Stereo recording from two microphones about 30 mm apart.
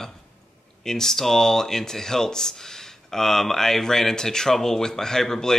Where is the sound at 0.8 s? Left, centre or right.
Centre.